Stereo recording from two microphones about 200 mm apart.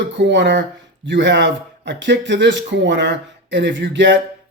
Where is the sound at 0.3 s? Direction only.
60° right (ahead or behind).